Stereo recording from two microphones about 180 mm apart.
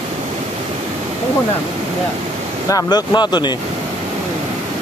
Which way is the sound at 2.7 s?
20° left (ahead or behind).